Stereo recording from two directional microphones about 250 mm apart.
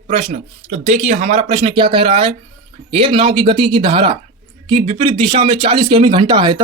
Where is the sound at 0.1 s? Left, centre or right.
Right.